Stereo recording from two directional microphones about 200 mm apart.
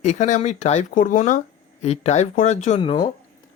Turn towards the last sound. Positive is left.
turn(degrees=25)  # may be behind; listen again after turning